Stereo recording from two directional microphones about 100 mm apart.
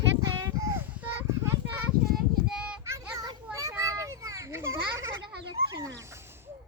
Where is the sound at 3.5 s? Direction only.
30° right (ahead or behind).